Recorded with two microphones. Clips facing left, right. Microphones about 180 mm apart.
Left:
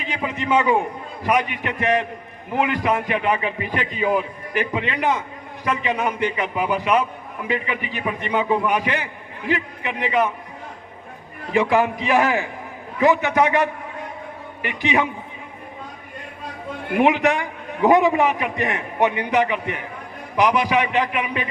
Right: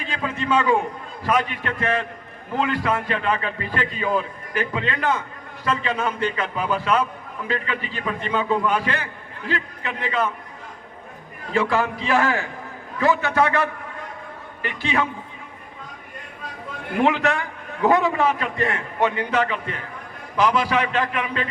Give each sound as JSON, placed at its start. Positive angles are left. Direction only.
{"t": 0.0, "sound": "a man's voice", "side_deg": 15}
{"t": 11.5, "sound": "a man's voice", "side_deg": 15}
{"t": 17.0, "sound": "a man's voice", "side_deg": 15}